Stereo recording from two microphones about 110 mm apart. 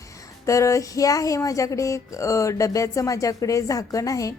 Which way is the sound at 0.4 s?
30° left (ahead or behind).